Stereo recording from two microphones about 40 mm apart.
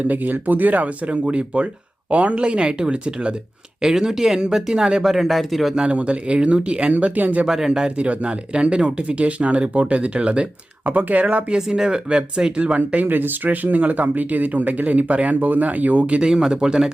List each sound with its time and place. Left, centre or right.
0.0 s speech: right
3.8 s speech: centre
5.0 s speech: centre
5.7 s speech: right
6.9 s speech: right
7.4 s speech: centre
7.9 s speech: right
11.5 s speech: centre
12.5 s speech: right
13.1 s speech: right
16.2 s speech: centre